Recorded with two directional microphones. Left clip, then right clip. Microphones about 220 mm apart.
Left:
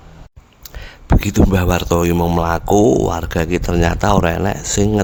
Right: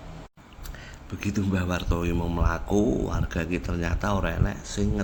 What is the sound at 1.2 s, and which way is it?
Speech, 50° left (ahead or behind).